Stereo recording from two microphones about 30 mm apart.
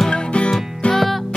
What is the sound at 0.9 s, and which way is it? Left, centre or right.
Music, centre.